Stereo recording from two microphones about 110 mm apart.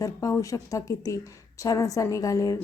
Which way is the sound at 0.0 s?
30° left (ahead or behind).